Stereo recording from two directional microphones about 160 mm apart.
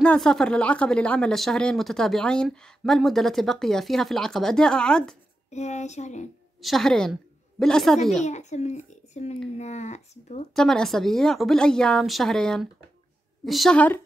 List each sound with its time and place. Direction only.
0.0 s speech: 5° left (ahead or behind)
5.5 s a child's voice: 45° left (ahead or behind)
6.6 s a woman's voice: centre (ahead or behind)
8.2 s a child's voice: 45° left (ahead or behind)
10.5 s a woman's voice: 5° left (ahead or behind)